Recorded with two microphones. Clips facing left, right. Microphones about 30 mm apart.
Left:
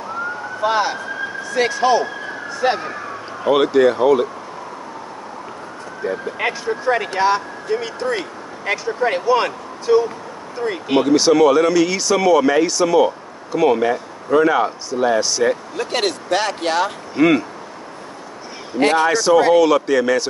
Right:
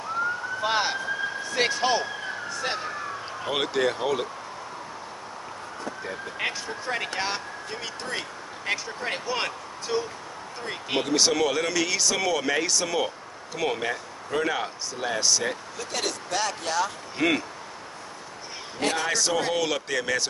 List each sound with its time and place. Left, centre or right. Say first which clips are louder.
0.6 s speech: left 8 dB; centre
2.6 s speech: left 12 dB; centre
3.4 s speech: left 12 dB; centre
6.0 s speech: left 10 dB; centre
15.7 s speech: left 10 dB; left
17.1 s speech: left 11 dB; centre
18.8 s speech: left 11 dB; left
19.0 s speech: left 12 dB; centre